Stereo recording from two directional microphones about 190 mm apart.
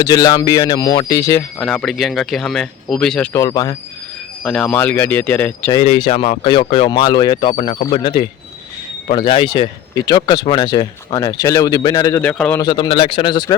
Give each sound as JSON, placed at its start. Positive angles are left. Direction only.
{"t": 0.0, "sound": "speech", "side_deg": 20}
{"t": 1.6, "sound": "speech", "side_deg": 0}
{"t": 3.3, "sound": "speech", "side_deg": 20}
{"t": 4.4, "sound": "speech", "side_deg": 5}
{"t": 5.7, "sound": "speech", "side_deg": 30}
{"t": 7.5, "sound": "speech", "side_deg": 35}
{"t": 12.2, "sound": "speech", "side_deg": 5}
{"t": 12.5, "sound": "speech", "side_deg": 20}